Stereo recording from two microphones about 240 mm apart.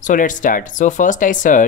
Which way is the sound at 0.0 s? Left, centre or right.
Left.